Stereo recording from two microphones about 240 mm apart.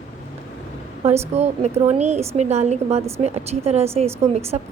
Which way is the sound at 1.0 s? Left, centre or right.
Right.